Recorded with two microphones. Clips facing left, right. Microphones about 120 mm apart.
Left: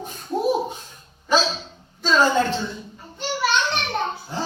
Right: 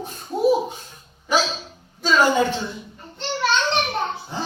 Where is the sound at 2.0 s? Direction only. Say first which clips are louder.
Right 1 dB; 10° right (ahead or behind).